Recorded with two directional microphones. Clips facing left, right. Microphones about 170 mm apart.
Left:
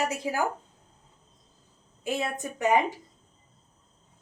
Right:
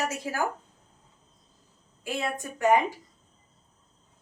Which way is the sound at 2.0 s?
20° left (ahead or behind).